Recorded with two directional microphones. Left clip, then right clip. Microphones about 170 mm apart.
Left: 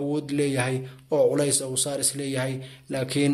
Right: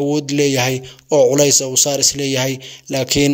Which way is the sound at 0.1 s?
40° right (ahead or behind).